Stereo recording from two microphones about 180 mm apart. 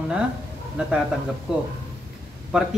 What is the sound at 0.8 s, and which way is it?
Speech, 5° right (ahead or behind).